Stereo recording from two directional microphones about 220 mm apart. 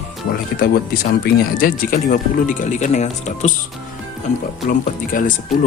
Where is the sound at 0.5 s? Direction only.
45° left (ahead or behind).